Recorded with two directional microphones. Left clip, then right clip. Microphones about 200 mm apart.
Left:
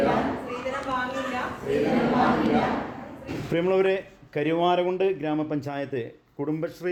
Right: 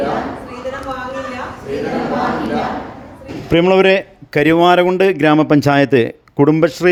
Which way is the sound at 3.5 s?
50° right (ahead or behind).